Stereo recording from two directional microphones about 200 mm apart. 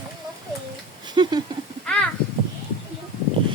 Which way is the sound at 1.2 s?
20° right (ahead or behind).